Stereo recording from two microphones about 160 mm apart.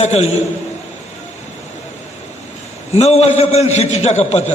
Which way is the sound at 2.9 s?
40° left (ahead or behind).